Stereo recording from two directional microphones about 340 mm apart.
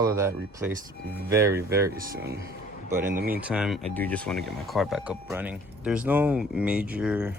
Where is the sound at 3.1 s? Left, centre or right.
Right.